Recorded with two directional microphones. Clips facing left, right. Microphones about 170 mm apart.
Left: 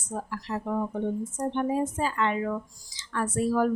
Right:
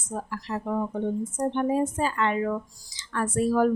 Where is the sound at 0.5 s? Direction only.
55° right (ahead or behind).